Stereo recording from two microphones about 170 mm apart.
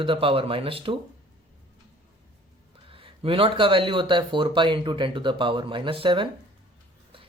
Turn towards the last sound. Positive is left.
turn(degrees=-30)  # may be behind; listen again after turning